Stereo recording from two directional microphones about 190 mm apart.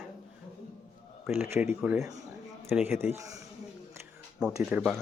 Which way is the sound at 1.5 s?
10° right (ahead or behind).